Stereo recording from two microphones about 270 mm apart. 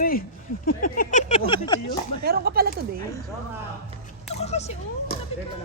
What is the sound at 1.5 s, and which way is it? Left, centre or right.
Speech, centre.